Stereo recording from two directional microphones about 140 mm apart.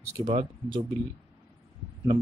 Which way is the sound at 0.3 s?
35° right (ahead or behind).